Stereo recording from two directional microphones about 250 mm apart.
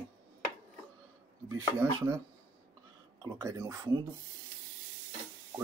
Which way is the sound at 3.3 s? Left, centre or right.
Centre.